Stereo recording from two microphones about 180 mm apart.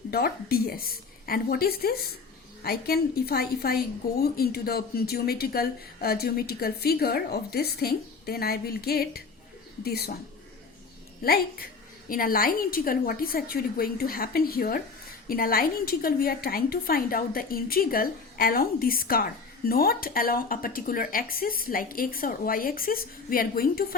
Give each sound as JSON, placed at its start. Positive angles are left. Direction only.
{"t": 0.1, "sound": "a woman's voice", "side_deg": 55}
{"t": 11.2, "sound": "a woman's voice", "side_deg": 55}